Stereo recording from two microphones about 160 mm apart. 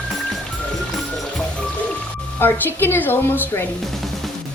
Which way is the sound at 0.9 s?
Centre (ahead or behind).